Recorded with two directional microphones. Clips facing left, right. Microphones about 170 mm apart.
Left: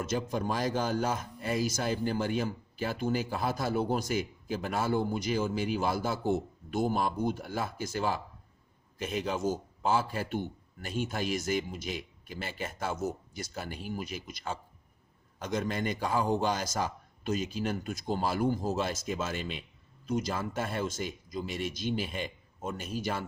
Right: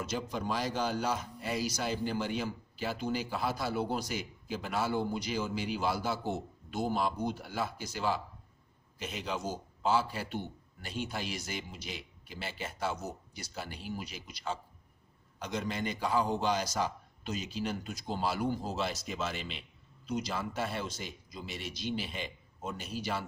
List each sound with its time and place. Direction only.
0.0 s a man's voice: 50° left (ahead or behind)